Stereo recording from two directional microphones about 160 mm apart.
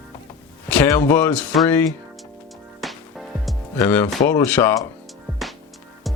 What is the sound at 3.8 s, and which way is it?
Speech, 10° left (ahead or behind).